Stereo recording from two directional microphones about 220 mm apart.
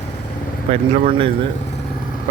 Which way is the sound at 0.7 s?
25° right (ahead or behind).